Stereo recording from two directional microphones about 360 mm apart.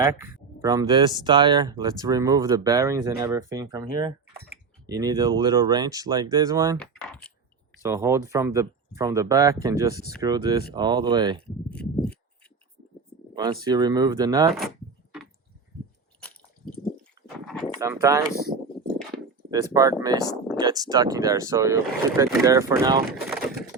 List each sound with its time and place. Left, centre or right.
0.0 s speech: centre
6.7 s speech: centre
11.7 s speech: centre
13.3 s speech: centre
17.4 s a sound: centre
17.7 s speech: centre
19.5 s speech: centre